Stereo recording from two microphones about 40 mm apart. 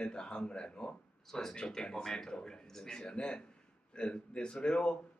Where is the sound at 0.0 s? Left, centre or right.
Left.